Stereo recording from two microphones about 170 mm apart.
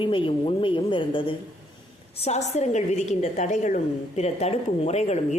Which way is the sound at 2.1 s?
40° left (ahead or behind).